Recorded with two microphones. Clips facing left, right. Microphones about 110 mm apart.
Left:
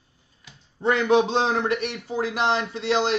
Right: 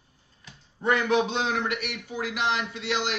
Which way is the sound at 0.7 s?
25° left (ahead or behind).